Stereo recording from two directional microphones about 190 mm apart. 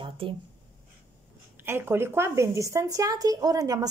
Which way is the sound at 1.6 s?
10° right (ahead or behind).